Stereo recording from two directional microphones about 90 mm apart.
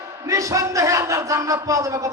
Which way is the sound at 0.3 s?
35° right (ahead or behind).